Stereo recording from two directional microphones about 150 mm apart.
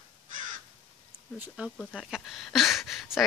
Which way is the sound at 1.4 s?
5° right (ahead or behind).